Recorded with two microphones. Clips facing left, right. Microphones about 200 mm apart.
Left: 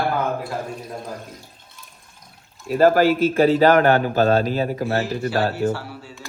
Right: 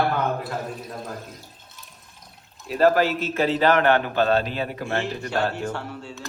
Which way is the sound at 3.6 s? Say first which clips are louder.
Left 4 dB; 40° left (ahead or behind).